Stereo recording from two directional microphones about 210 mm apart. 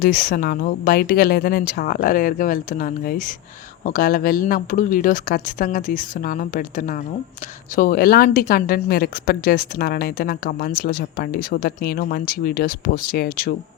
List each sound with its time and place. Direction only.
0.0 s speech: 45° left (ahead or behind)